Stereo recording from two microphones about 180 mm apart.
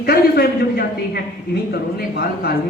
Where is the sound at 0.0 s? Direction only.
60° left (ahead or behind).